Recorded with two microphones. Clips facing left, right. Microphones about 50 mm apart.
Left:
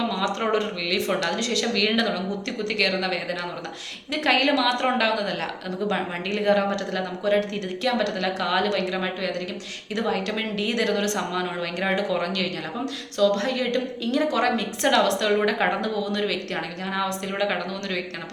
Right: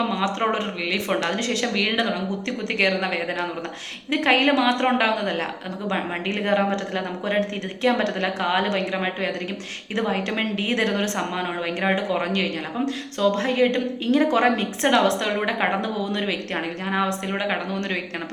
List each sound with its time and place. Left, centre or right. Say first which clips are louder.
0.3 s speech: even; centre
0.9 s a woman's voice: right 3 dB; right
1.8 s speech: left 1 dB; centre
2.7 s a woman's voice: right 3 dB; right
17.7 s a woman's voice: right 2 dB; right